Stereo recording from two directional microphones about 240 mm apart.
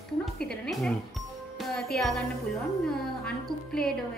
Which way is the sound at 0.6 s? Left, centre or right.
Centre.